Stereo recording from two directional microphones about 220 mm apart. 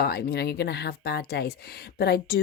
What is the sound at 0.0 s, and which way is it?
Speech, 45° left (ahead or behind).